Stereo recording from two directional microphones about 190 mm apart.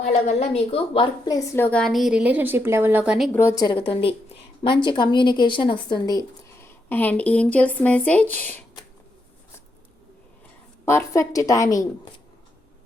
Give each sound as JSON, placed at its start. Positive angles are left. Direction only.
{"t": 0.1, "sound": "a woman's voice", "side_deg": 35}
{"t": 3.3, "sound": "a woman's voice", "side_deg": 15}
{"t": 10.8, "sound": "speech", "side_deg": 15}